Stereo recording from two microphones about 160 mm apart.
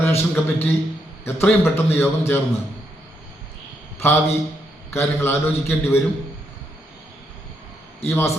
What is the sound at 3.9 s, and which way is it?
A man's voice, 15° left (ahead or behind).